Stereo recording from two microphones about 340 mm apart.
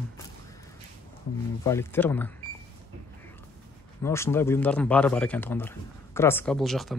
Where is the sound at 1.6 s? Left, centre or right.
Centre.